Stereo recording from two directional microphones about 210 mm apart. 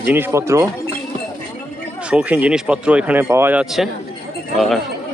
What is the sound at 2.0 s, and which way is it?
Speech, 5° right (ahead or behind).